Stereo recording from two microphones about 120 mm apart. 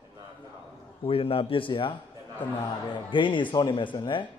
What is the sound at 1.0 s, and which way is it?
Speech, 50° left (ahead or behind).